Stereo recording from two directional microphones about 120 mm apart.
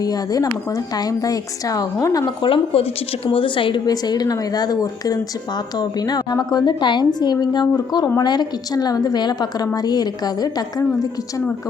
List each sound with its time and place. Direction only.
0.0 s a woman's voice: 30° left (ahead or behind)
2.7 s a woman's voice: 50° left (ahead or behind)
3.8 s a woman's voice: 35° left (ahead or behind)